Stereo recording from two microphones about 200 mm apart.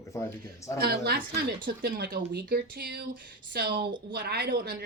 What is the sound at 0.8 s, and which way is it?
A woman's voice, 55° right (ahead or behind).